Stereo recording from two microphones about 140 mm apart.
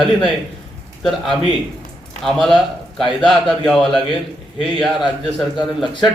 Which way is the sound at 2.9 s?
Centre (ahead or behind).